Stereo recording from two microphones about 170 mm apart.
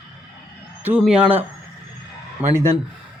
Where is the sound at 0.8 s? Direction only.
5° right (ahead or behind).